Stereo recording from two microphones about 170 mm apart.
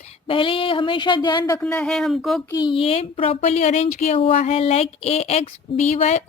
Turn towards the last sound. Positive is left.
turn(degrees=40)  # may be behind; listen again after turning